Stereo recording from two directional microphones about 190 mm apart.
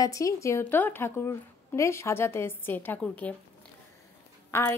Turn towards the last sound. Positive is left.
turn(degrees=10)  # may be behind; listen again after turning